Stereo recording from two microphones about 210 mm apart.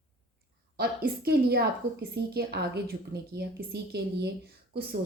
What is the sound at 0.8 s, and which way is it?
A woman's voice, 45° right (ahead or behind).